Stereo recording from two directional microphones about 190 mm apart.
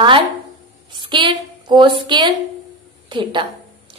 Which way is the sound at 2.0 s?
25° right (ahead or behind).